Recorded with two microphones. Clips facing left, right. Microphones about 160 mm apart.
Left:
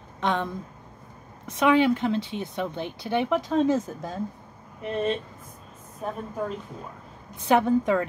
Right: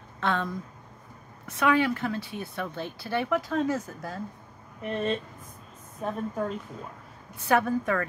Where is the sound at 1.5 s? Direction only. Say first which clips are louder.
Left 4 dB; 20° left (ahead or behind).